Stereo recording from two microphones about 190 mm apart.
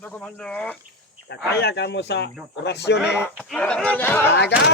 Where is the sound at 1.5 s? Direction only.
65° left (ahead or behind).